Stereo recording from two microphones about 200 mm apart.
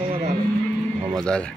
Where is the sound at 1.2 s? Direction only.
5° left (ahead or behind).